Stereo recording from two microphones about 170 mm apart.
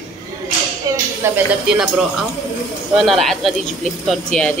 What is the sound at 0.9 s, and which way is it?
Music, 20° right (ahead or behind).